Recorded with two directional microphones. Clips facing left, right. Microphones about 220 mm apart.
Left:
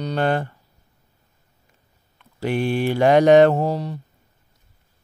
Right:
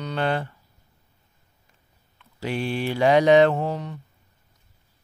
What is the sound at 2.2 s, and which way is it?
Mantra, 55° left (ahead or behind).